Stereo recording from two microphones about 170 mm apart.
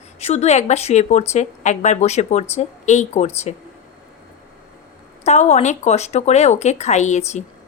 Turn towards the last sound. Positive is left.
turn(degrees=45)  # may be behind; listen again after turning